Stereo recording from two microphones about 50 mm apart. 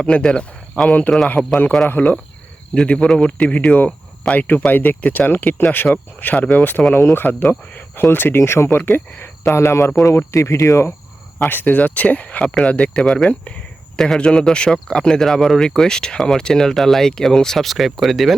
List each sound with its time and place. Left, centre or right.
0.0 s speech: centre
1.4 s a man's voice: centre
2.8 s speech: left
6.9 s speech: left
8.4 s speech: left
9.4 s speech: left
11.4 s a man's voice: left; by 18.3 s centre